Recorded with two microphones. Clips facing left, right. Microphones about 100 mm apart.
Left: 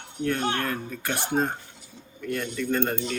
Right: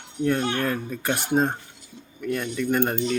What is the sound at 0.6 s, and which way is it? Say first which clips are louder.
Speech: right 3 dB; 15° right (ahead or behind).